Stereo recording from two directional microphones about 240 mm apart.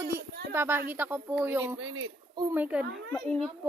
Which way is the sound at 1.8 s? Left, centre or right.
Right.